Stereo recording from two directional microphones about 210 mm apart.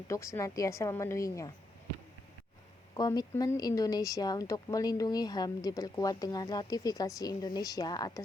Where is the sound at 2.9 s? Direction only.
20° left (ahead or behind).